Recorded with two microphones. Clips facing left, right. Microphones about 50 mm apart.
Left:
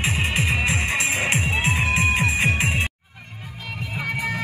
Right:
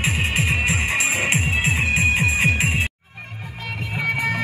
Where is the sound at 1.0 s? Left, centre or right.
Right.